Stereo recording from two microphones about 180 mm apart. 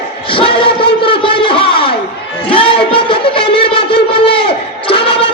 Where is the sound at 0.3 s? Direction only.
30° left (ahead or behind).